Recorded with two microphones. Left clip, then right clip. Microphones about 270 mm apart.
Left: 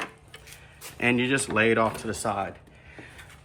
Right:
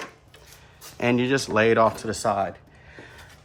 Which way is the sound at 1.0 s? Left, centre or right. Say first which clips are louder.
Right 2 dB; right.